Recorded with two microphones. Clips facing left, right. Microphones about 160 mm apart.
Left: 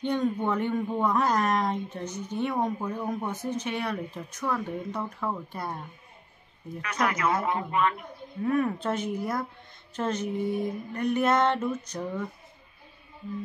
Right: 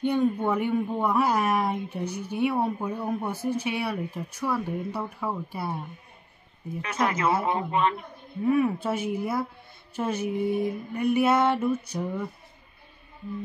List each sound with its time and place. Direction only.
0.0 s speech: 10° right (ahead or behind)
6.8 s speech: 25° right (ahead or behind)
8.5 s speech: 10° right (ahead or behind)